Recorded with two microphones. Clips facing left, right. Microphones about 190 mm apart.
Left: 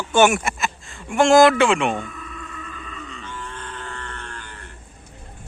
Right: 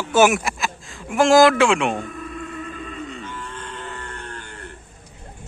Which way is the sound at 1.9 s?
35° right (ahead or behind).